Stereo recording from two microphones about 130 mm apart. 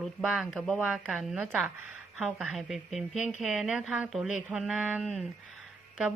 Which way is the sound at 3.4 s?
5° right (ahead or behind).